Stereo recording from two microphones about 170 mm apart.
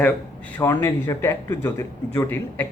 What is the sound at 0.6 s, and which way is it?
A man's voice, 15° left (ahead or behind).